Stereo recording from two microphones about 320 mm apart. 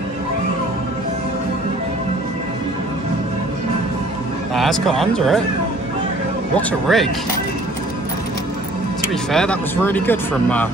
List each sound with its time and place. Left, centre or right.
4.6 s speech: centre
6.5 s speech: centre
9.3 s speech: centre